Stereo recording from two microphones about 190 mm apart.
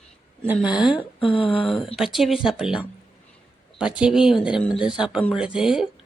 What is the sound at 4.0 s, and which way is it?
Speech, centre (ahead or behind).